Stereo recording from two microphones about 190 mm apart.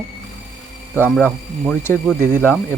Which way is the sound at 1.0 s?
Centre (ahead or behind).